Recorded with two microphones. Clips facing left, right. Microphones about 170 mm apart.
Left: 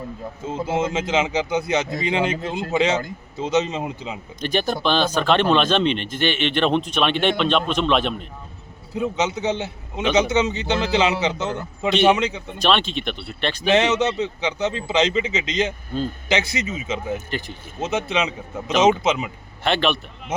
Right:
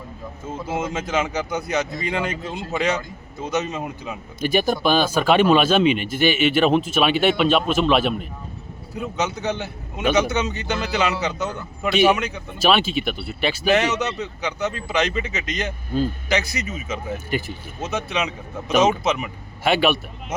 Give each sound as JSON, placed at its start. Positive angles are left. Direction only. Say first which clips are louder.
{"t": 0.4, "sound": "speech", "louder": "left 3 dB", "side_deg": 25}
{"t": 4.4, "sound": "speech", "louder": "right 3 dB", "side_deg": -10}
{"t": 9.0, "sound": "speech", "louder": "left 3 dB", "side_deg": 20}
{"t": 12.5, "sound": "speech", "louder": "right 2 dB", "side_deg": -5}
{"t": 13.7, "sound": "speech", "louder": "left 3 dB", "side_deg": 25}
{"t": 19.6, "sound": "speech", "louder": "right 2 dB", "side_deg": -10}